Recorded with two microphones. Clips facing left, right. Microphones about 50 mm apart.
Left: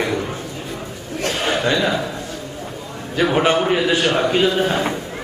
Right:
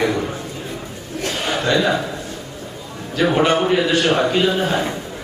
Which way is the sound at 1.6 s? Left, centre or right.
Centre.